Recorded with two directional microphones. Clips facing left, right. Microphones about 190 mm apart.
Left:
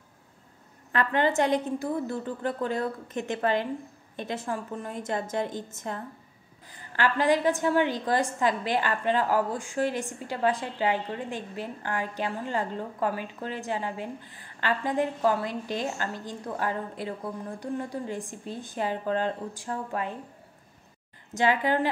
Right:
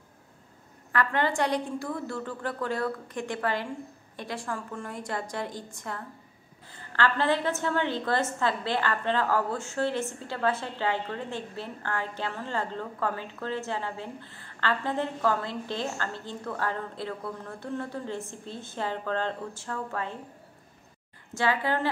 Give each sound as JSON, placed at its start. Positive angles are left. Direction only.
{"t": 0.9, "sound": "a woman's voice", "side_deg": 20}
{"t": 21.3, "sound": "a woman's voice", "side_deg": 20}